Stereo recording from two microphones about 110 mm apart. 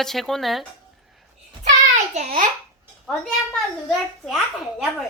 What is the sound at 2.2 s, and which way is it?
Speech, 90° right.